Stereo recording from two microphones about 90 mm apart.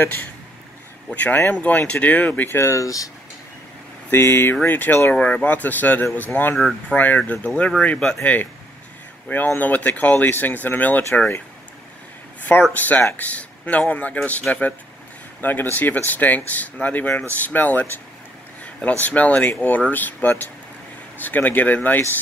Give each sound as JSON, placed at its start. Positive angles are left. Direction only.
{"t": 0.0, "sound": "speech", "side_deg": 20}
{"t": 4.1, "sound": "speech", "side_deg": 25}
{"t": 6.5, "sound": "speech", "side_deg": 5}
{"t": 7.0, "sound": "speech", "side_deg": 20}
{"t": 9.6, "sound": "speech", "side_deg": 20}
{"t": 12.7, "sound": "speech", "side_deg": 20}
{"t": 15.4, "sound": "speech", "side_deg": 20}